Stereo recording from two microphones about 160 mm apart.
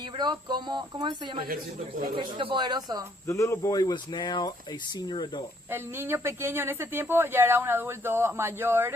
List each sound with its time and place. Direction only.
0.2 s speech: 25° right (ahead or behind)
3.2 s speech: 20° left (ahead or behind)
5.7 s a woman's voice: 15° right (ahead or behind)